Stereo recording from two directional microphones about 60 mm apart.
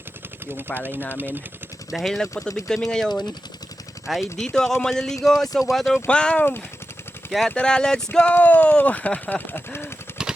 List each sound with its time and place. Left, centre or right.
0.4 s speech: right
1.9 s speech: centre
4.0 s speech: centre
4.4 s speech: centre
6.1 s speech: centre
7.5 s speech: centre
8.3 s speech: left
10.1 s a sound: left